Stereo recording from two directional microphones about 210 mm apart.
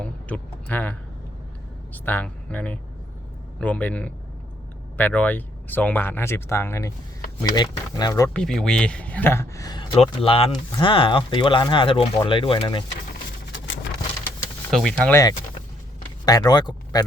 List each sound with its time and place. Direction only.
0.0 s speech: 5° left (ahead or behind)
8.3 s speech: 5° left (ahead or behind); by 12.8 s 25° left (ahead or behind)
14.7 s speech: centre (ahead or behind)
16.0 s a sound: 20° left (ahead or behind)